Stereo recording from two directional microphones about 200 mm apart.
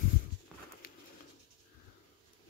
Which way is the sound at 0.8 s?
45° left (ahead or behind).